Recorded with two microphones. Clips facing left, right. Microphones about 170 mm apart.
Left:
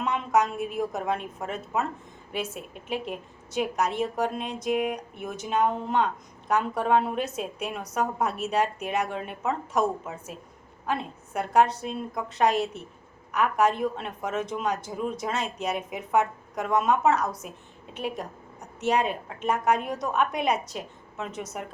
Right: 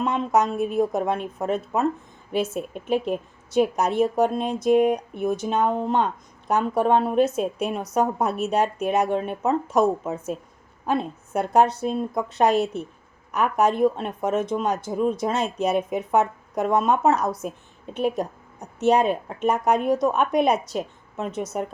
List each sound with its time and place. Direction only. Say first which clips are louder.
0.5 s a woman's voice: right 7 dB; 35° right (ahead or behind)
2.9 s a woman's voice: right 8 dB; 45° right (ahead or behind)
18.9 s speech: right 5 dB; 45° right (ahead or behind)